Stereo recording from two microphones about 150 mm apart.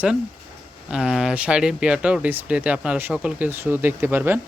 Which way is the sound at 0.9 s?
5° right (ahead or behind).